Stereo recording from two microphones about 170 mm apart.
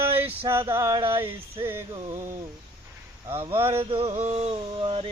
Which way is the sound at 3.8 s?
35° right (ahead or behind).